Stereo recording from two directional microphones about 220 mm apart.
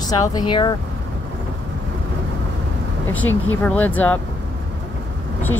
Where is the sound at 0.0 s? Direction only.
15° left (ahead or behind).